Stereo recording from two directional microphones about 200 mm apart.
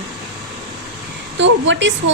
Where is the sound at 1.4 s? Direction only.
65° right (ahead or behind).